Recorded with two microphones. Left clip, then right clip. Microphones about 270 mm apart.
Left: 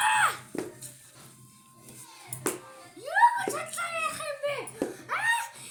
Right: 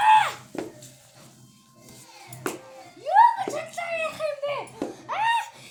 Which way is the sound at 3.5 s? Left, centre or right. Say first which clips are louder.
Right 2 dB; left.